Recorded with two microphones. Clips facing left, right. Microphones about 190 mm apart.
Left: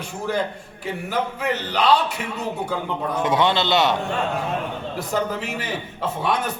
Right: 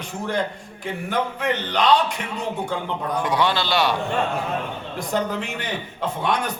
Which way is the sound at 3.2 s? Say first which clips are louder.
Left 3 dB; 20° left (ahead or behind).